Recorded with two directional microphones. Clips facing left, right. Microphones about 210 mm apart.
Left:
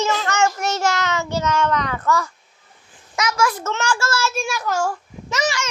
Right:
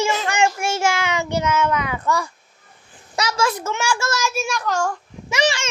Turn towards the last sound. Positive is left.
turn(degrees=-30)  # may be behind; listen again after turning